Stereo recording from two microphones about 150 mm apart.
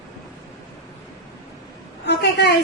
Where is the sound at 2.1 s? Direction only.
90° left.